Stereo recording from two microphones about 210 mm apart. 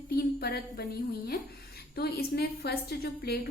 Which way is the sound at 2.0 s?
50° left (ahead or behind).